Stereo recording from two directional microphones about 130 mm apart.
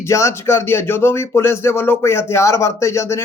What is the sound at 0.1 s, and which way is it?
Speech, 20° left (ahead or behind).